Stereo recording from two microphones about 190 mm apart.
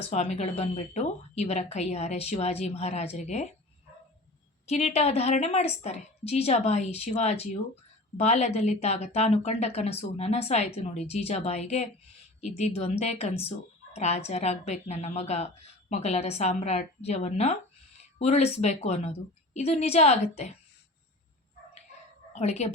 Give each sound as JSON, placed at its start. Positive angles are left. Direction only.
{"t": 0.1, "sound": "speech", "side_deg": 35}
{"t": 4.6, "sound": "speech", "side_deg": 35}
{"t": 22.3, "sound": "speech", "side_deg": 35}